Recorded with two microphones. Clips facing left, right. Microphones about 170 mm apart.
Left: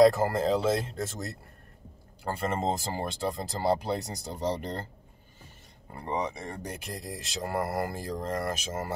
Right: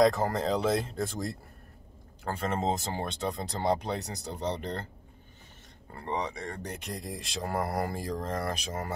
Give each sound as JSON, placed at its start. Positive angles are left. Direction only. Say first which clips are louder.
{"t": 0.0, "sound": "speech", "louder": "left 3 dB", "side_deg": 5}
{"t": 5.9, "sound": "speech", "louder": "left 1 dB", "side_deg": 15}